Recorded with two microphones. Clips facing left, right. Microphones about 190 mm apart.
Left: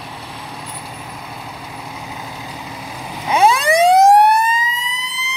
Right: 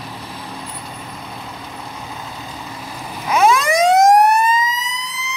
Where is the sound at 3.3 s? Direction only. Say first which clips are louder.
Left 1 dB; 30° left (ahead or behind).